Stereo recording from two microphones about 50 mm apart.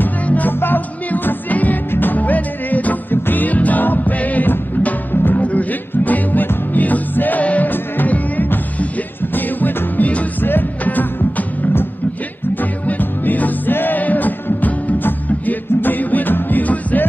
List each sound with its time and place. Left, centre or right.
0.0 s music: left
5.4 s music: left